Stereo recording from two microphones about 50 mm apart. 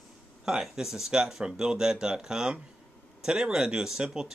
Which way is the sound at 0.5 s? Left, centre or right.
Centre.